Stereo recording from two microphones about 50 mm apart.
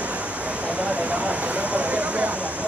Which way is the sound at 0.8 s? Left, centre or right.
Right.